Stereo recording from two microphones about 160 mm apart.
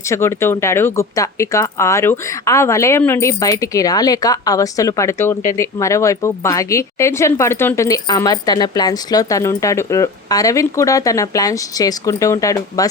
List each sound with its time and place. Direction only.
0.1 s speech: 15° left (ahead or behind)